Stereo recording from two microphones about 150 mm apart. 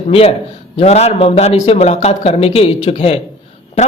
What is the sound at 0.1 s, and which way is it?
A man's voice, 40° left (ahead or behind).